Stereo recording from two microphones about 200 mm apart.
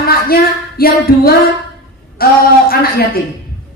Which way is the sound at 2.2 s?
50° left (ahead or behind).